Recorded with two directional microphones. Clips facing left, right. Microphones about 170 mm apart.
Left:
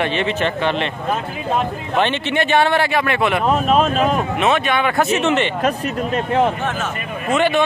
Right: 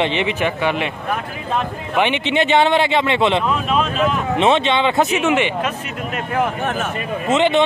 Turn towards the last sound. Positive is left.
turn(degrees=-20)  # may be behind; listen again after turning